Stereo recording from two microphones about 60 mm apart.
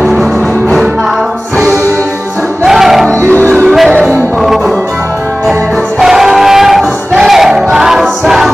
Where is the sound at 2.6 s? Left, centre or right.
Centre.